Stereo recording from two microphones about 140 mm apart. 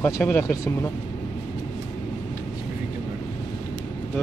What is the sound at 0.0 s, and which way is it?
Speech, 15° left (ahead or behind).